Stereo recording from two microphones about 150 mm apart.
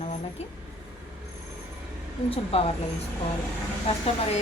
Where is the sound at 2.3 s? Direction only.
40° left (ahead or behind).